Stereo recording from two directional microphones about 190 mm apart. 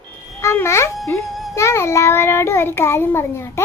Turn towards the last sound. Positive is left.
turn(degrees=15)  # may be behind; listen again after turning